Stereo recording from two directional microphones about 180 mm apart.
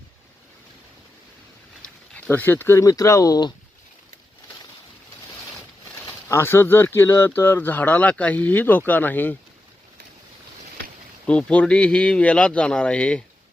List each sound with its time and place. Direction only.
2.1 s speech: 10° left (ahead or behind)
6.1 s speech: 15° left (ahead or behind)
11.3 s a man's voice: 5° left (ahead or behind)